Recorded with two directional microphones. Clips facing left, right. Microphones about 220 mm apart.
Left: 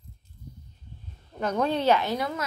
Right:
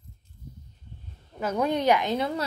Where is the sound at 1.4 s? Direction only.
10° right (ahead or behind).